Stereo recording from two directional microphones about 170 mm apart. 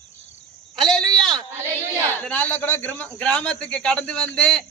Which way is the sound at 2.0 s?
10° left (ahead or behind).